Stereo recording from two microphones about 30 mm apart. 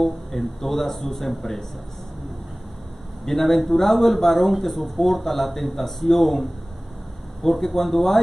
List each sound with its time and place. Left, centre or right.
0.0 s speech: centre
3.3 s speech: centre